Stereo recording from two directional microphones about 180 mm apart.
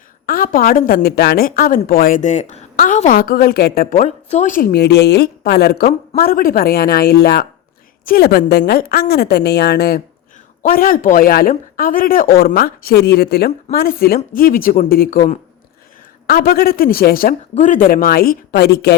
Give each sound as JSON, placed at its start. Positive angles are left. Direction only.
{"t": 0.3, "sound": "a woman's voice", "side_deg": 50}
{"t": 4.0, "sound": "a woman's voice", "side_deg": 40}
{"t": 17.5, "sound": "a woman's voice", "side_deg": 45}